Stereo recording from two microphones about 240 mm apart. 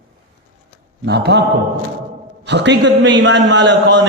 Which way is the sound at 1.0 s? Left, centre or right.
Right.